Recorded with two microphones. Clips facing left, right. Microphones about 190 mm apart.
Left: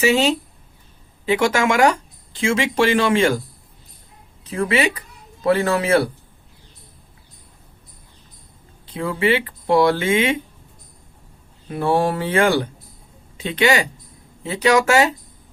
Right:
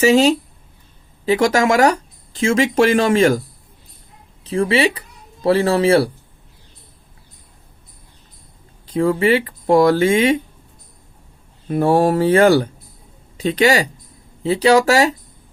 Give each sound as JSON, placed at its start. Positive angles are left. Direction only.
{"t": 0.0, "sound": "speech", "side_deg": -40}
{"t": 4.4, "sound": "speech", "side_deg": -30}
{"t": 8.9, "sound": "speech", "side_deg": -40}
{"t": 11.7, "sound": "speech", "side_deg": -40}